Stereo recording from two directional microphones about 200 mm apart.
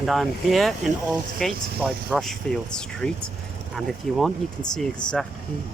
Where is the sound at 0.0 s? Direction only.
Centre (ahead or behind).